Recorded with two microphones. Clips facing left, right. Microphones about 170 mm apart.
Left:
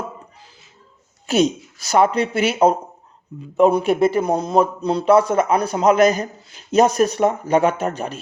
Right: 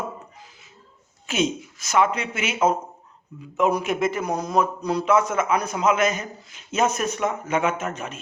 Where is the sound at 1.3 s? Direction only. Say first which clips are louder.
Left 6 dB; 35° left (ahead or behind).